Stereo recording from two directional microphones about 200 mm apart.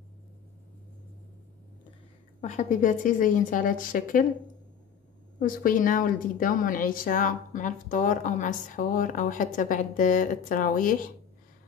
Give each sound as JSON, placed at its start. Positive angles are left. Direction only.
{"t": 2.4, "sound": "a woman's voice", "side_deg": 35}
{"t": 5.4, "sound": "a woman's voice", "side_deg": 45}